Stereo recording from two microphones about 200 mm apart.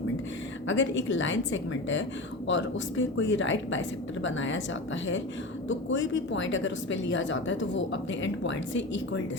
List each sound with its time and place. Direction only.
0.7 s speech: 70° left (ahead or behind)
5.6 s speech: 65° left (ahead or behind)